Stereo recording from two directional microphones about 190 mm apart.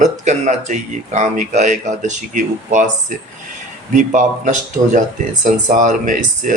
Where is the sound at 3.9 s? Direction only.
40° right (ahead or behind).